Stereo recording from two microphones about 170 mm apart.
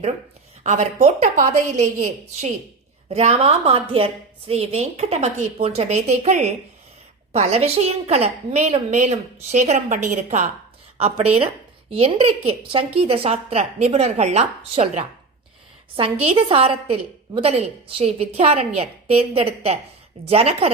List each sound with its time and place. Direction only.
0.6 s a woman's voice: 45° right (ahead or behind)
16.2 s a woman's voice: 35° right (ahead or behind)